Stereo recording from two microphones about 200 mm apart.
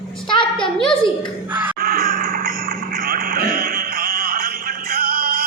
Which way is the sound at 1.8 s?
50° right (ahead or behind).